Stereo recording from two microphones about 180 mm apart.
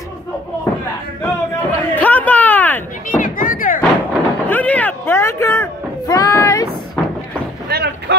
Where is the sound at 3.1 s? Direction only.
50° left (ahead or behind).